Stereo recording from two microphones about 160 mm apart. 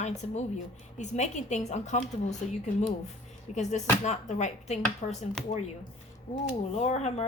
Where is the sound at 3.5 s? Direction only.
50° left (ahead or behind).